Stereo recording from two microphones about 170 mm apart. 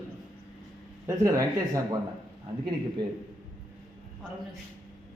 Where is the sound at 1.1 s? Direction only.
20° right (ahead or behind).